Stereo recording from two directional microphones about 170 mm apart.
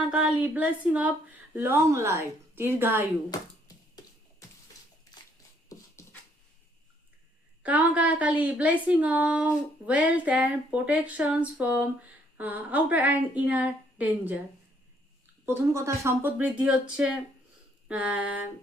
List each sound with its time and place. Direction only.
0.1 s speech: 5° right (ahead or behind)
5.7 s a sound: 20° left (ahead or behind)
7.6 s speech: 10° right (ahead or behind)
15.4 s speech: 15° right (ahead or behind)